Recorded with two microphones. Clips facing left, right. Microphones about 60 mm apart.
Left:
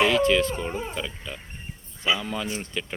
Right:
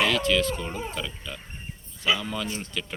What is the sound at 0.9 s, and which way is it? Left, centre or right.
Speech, centre.